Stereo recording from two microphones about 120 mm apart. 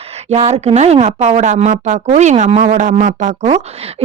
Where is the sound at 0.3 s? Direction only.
65° right (ahead or behind); by 3.6 s 80° right.